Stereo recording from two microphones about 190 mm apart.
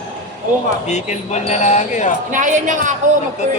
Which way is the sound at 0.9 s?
40° left (ahead or behind).